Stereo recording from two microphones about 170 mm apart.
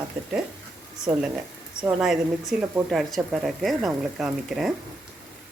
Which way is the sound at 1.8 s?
5° right (ahead or behind).